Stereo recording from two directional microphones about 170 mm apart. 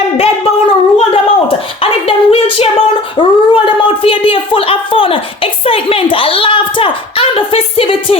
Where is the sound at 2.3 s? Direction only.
35° left (ahead or behind).